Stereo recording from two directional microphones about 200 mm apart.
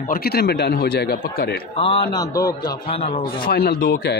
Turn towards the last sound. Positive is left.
turn(degrees=50)  # may be behind; listen again after turning